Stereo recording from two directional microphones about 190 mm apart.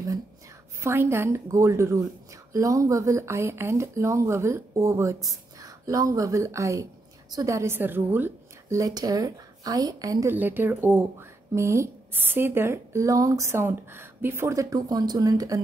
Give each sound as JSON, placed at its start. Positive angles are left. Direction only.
{"t": 0.7, "sound": "speech", "side_deg": -15}